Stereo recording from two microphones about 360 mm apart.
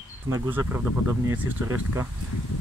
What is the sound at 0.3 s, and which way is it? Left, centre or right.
Speech, centre.